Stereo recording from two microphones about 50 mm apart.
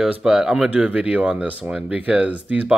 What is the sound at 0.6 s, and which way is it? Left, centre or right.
Speech, right.